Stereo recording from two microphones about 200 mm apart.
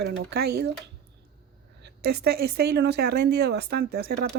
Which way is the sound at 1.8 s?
55° right (ahead or behind).